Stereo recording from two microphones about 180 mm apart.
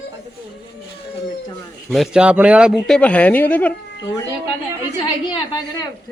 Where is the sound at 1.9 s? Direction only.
Centre (ahead or behind).